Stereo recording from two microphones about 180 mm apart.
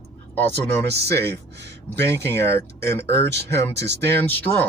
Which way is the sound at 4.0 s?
10° left (ahead or behind).